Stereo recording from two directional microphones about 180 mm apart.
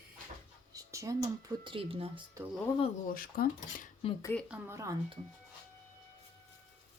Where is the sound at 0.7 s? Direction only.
20° right (ahead or behind).